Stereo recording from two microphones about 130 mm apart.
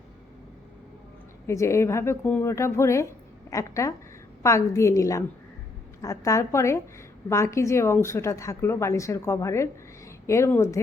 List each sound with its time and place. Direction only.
1.5 s a woman's voice: 20° left (ahead or behind)